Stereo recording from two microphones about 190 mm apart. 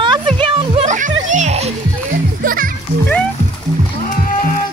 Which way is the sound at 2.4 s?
50° right (ahead or behind).